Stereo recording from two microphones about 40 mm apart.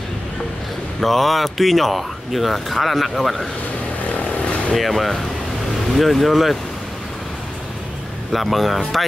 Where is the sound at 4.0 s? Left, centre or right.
Left.